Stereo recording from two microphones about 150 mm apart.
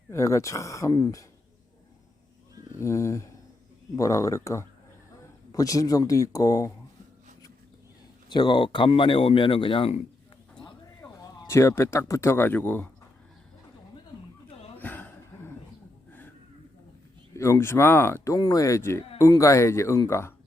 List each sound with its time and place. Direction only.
0.1 s speech: 20° left (ahead or behind)
2.7 s speech: 20° left (ahead or behind)
8.3 s speech: 30° left (ahead or behind)
11.0 s speech: 20° left (ahead or behind)
14.8 s a sound: 10° left (ahead or behind)
17.3 s speech: 20° left (ahead or behind)